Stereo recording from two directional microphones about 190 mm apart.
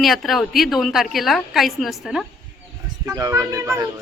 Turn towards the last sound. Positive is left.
turn(degrees=-15)  # may be behind; listen again after turning